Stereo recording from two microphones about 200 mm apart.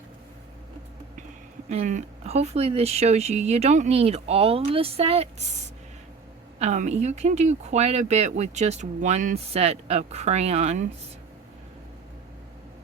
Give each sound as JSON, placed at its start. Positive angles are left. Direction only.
{"t": 1.7, "sound": "speech", "side_deg": -35}
{"t": 6.6, "sound": "speech", "side_deg": -35}